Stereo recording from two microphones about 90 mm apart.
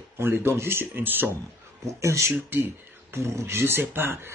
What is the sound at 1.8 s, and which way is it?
Speech, 35° right (ahead or behind).